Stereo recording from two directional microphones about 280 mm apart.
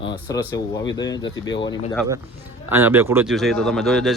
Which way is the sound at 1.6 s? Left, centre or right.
Centre.